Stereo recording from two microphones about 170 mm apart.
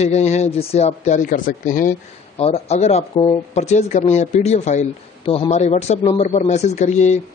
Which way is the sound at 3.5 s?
40° left (ahead or behind).